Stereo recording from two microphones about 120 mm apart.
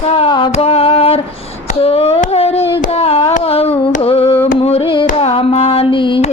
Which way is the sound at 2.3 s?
55° left (ahead or behind).